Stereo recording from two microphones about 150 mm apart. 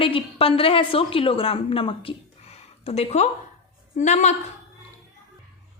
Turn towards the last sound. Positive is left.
turn(degrees=50)  # may be behind; listen again after turning